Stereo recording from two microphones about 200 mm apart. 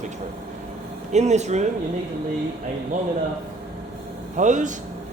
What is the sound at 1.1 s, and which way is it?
Speech, 35° right (ahead or behind).